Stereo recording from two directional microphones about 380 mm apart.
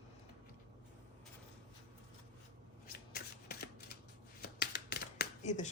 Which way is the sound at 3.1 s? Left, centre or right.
Left.